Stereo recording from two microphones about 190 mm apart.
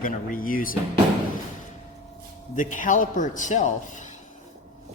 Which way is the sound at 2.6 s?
40° left (ahead or behind).